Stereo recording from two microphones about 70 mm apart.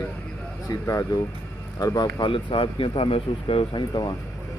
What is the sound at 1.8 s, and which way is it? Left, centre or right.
Speech, left.